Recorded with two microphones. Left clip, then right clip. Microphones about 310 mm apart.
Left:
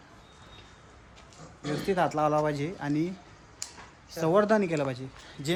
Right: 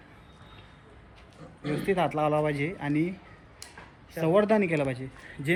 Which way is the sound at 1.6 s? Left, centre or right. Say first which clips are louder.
Even; centre.